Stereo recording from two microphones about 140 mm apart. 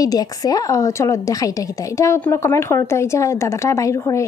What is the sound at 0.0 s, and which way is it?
A woman's voice, 25° left (ahead or behind).